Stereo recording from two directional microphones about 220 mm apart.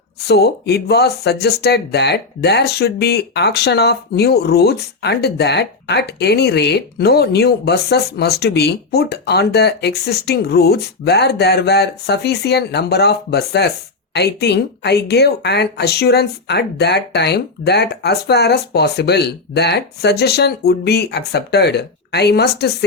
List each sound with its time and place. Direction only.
0.2 s speech: 45° left (ahead or behind)